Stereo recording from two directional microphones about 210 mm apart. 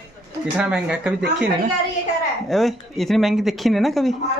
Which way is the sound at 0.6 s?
5° right (ahead or behind).